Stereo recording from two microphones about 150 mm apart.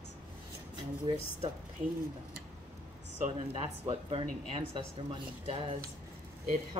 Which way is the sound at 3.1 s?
50° right (ahead or behind).